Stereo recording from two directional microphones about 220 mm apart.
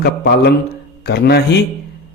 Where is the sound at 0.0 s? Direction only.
45° left (ahead or behind).